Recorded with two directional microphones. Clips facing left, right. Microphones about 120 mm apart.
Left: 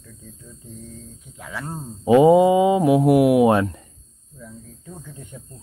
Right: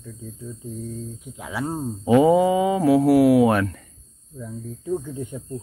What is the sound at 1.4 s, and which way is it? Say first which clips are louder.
Speech: right 5 dB; 10° right (ahead or behind).